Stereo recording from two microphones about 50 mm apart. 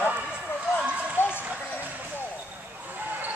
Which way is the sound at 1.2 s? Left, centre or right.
Left.